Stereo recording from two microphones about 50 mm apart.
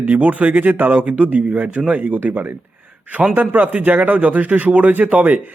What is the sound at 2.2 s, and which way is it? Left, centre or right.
Speech, right.